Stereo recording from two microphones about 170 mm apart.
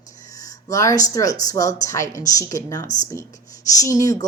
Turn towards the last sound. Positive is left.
turn(degrees=20)  # may be behind; listen again after turning